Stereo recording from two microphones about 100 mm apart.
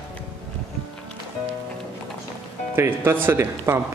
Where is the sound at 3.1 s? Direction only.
25° right (ahead or behind).